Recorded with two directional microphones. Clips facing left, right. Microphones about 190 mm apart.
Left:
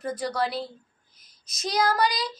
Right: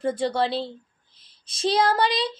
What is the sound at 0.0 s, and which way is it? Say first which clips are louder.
Speech: right 4 dB; 30° right (ahead or behind).